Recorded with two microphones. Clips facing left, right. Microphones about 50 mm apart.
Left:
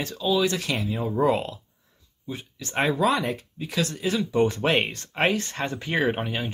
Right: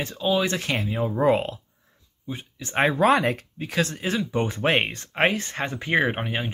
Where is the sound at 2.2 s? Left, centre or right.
Right.